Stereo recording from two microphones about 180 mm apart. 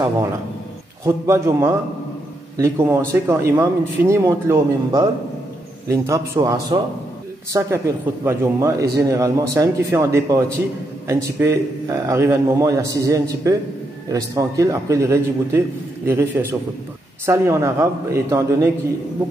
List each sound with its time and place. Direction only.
1.0 s speech: 15° right (ahead or behind)